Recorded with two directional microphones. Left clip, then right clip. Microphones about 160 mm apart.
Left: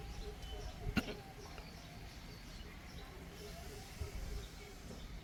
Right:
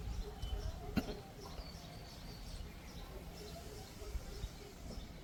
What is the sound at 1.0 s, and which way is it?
Cough, centre (ahead or behind).